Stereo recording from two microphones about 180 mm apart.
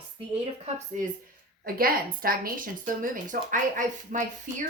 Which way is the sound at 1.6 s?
55° right (ahead or behind).